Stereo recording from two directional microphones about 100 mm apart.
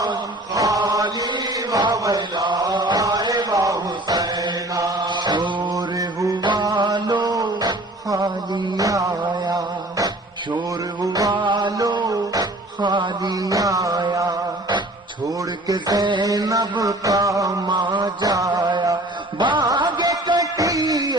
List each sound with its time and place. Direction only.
0.0 s chant: 40° right (ahead or behind)
11.0 s music: 40° right (ahead or behind)
11.8 s a sound: 45° right (ahead or behind)
15.6 s mantra: 40° right (ahead or behind)
16.3 s a sound: 40° right (ahead or behind)
17.7 s mantra: 50° right (ahead or behind)
19.4 s music: 50° right (ahead or behind)